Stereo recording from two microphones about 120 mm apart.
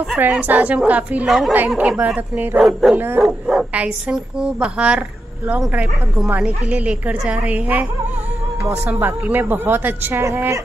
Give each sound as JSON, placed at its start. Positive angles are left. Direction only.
{"t": 0.2, "sound": "speech", "side_deg": -15}
{"t": 2.6, "sound": "dog", "side_deg": 0}
{"t": 3.4, "sound": "speech", "side_deg": -10}
{"t": 8.8, "sound": "speech", "side_deg": -15}